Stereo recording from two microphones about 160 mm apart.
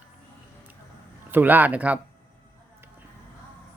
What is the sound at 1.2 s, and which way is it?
Speech, 10° right (ahead or behind).